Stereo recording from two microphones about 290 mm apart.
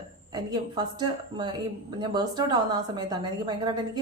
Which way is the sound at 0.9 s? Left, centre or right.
Centre.